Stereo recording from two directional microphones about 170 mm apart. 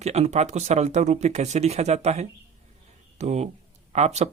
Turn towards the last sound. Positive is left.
turn(degrees=-40)  # may be behind; listen again after turning